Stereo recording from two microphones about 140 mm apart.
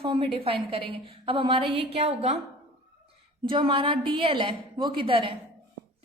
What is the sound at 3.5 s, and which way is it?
A woman's voice, 35° right (ahead or behind).